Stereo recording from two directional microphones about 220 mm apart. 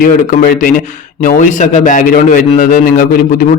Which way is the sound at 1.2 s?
35° left (ahead or behind).